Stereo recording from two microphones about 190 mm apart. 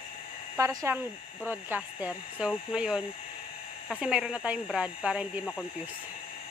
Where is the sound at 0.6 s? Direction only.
15° right (ahead or behind).